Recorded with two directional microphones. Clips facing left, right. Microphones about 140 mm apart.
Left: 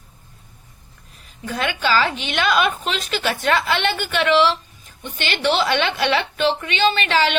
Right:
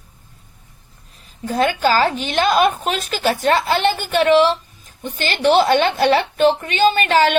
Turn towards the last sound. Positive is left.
turn(degrees=-45)  # may be behind; listen again after turning